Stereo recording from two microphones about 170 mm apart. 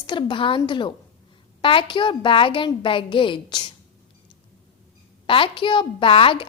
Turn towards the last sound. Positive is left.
turn(degrees=30)  # may be behind; listen again after turning